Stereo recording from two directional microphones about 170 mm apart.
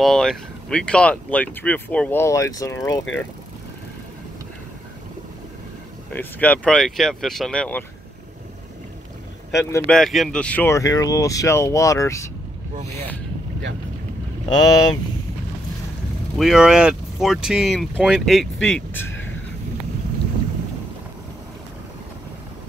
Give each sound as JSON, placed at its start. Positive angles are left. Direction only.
{"t": 0.0, "sound": "speech", "side_deg": 0}
{"t": 6.1, "sound": "speech", "side_deg": 10}
{"t": 9.6, "sound": "speech", "side_deg": 15}
{"t": 9.8, "sound": "speech", "side_deg": 0}
{"t": 14.5, "sound": "speech", "side_deg": 20}
{"t": 16.3, "sound": "speech", "side_deg": -5}